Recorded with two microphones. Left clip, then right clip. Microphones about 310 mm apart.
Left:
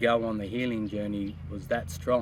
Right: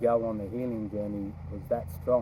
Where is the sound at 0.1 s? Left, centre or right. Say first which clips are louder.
Left 1 dB; left.